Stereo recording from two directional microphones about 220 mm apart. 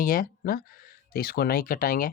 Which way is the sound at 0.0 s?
40° left (ahead or behind).